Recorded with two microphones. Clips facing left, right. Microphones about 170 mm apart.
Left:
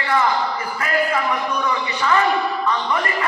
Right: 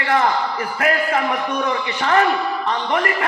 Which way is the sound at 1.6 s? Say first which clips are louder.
Even; 55° right (ahead or behind).